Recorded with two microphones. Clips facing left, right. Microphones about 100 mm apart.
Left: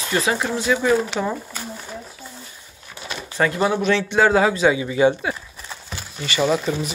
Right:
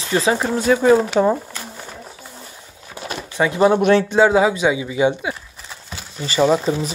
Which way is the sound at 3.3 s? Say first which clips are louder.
Right 4 dB; 15° right (ahead or behind).